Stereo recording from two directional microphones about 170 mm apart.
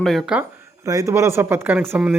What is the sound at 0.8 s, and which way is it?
Speech, 20° right (ahead or behind).